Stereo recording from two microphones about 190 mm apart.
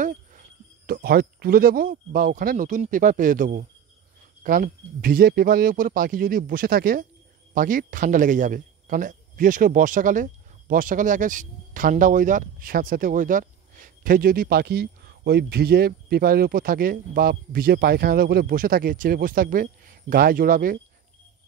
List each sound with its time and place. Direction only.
0.0 s a man's voice: 45° right (ahead or behind)